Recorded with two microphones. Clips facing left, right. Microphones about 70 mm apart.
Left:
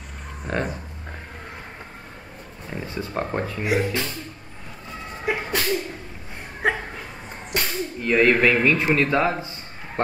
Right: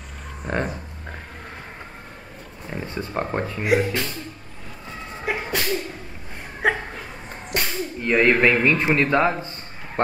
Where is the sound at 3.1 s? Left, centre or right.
Centre.